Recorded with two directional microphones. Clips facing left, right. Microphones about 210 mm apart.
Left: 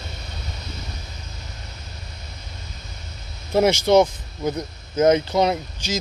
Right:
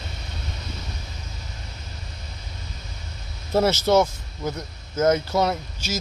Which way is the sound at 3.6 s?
15° left (ahead or behind).